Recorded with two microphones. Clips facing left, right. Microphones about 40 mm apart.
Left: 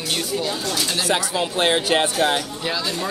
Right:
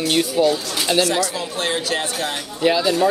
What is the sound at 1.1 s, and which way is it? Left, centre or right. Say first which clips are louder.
Speech: even; left.